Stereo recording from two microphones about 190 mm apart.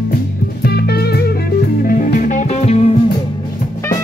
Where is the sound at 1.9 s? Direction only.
50° left (ahead or behind).